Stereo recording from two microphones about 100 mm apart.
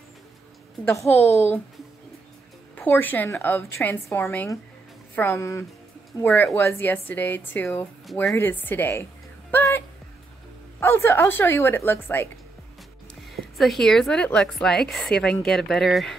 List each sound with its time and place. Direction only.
1.1 s speech: 25° left (ahead or behind)
2.7 s speech: 20° left (ahead or behind)
13.3 s a woman's voice: centre (ahead or behind)